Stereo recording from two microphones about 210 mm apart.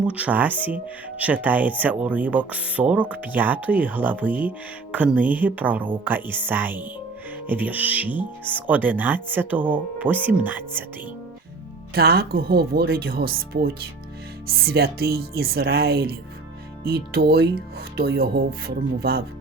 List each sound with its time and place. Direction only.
0.1 s speech: 5° right (ahead or behind)
11.9 s speech: 45° right (ahead or behind)